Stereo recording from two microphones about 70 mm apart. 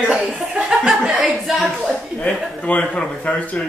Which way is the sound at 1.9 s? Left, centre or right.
Centre.